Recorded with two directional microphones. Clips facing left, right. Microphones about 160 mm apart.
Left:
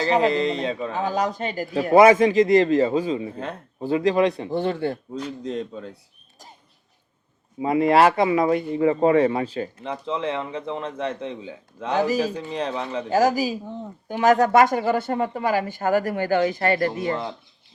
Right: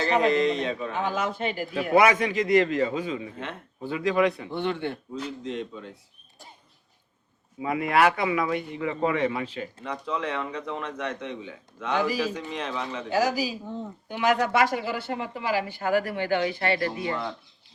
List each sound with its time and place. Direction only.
0.0 s a man's voice: 35° left (ahead or behind)
7.6 s a man's voice: 30° left (ahead or behind)
9.8 s a man's voice: 25° left (ahead or behind); by 17.2 s 45° left (ahead or behind)